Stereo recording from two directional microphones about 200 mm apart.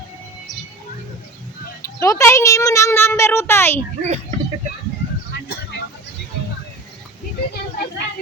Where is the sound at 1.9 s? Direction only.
15° left (ahead or behind).